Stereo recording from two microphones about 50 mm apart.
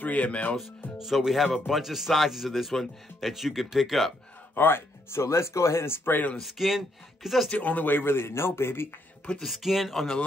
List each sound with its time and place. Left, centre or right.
0.0 s speech: left
0.9 s speech: centre
4.6 s speech: left
5.2 s speech: left
6.0 s speech: left
6.3 s speech: centre
7.5 s speech: left
9.4 s speech: centre